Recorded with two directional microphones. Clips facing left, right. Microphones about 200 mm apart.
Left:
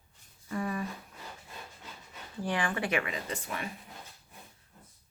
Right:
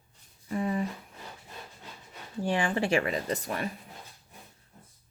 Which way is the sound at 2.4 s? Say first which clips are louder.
Right 4 dB; 25° right (ahead or behind).